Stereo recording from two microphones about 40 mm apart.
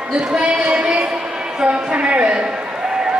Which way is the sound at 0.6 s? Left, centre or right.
Right.